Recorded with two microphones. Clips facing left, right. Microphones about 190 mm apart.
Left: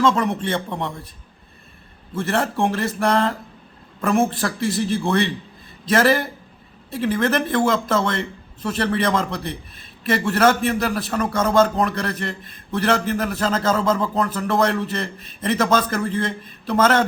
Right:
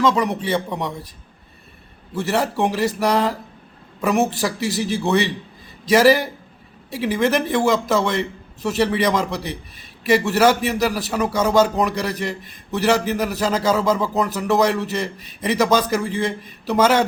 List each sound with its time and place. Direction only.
0.1 s speech: 5° right (ahead or behind)
2.1 s speech: 10° right (ahead or behind)
5.9 s speech: 10° right (ahead or behind)